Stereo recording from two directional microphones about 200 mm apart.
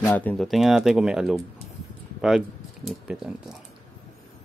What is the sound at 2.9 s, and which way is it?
Speech, 5° right (ahead or behind).